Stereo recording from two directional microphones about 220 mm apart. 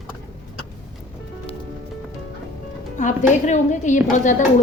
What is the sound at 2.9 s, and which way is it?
A woman's voice, 35° left (ahead or behind).